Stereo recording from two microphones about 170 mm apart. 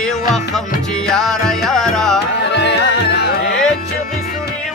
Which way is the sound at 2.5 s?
90° left.